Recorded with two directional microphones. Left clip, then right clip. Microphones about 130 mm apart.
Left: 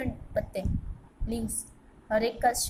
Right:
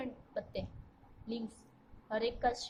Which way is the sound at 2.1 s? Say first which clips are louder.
Left 8 dB; 25° left (ahead or behind).